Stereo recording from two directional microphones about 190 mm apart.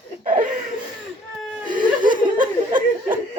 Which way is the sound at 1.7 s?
25° right (ahead or behind).